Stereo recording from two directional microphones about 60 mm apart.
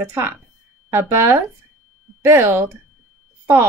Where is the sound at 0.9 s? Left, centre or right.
Right.